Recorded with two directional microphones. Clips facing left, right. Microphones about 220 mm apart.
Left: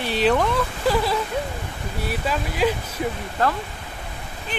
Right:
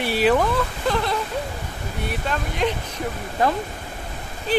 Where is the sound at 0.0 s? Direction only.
5° right (ahead or behind).